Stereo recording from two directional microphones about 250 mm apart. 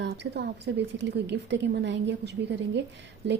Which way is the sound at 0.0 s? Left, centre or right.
Right.